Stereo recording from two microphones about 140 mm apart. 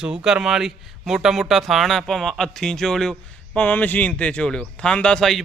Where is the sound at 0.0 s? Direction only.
5° right (ahead or behind).